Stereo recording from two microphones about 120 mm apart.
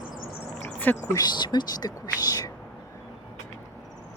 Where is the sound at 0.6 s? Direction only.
15° left (ahead or behind).